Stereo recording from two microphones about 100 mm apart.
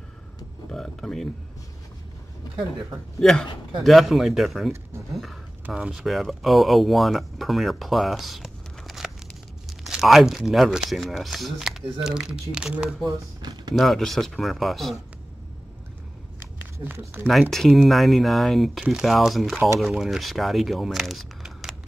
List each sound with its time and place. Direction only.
0.7 s speech: 5° left (ahead or behind)
3.2 s speech: 5° left (ahead or behind)
13.0 s speech: 40° right (ahead or behind)
13.7 s speech: centre (ahead or behind)
16.3 s a sound: 20° right (ahead or behind)
17.3 s speech: centre (ahead or behind)